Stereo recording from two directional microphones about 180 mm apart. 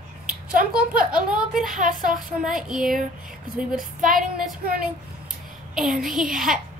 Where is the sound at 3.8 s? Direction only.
50° right (ahead or behind).